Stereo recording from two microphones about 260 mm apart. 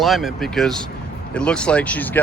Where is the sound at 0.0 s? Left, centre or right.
Centre.